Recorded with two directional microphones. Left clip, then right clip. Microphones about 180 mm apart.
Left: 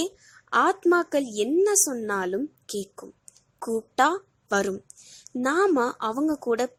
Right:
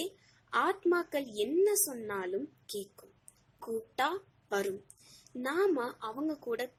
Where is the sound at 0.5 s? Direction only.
45° left (ahead or behind).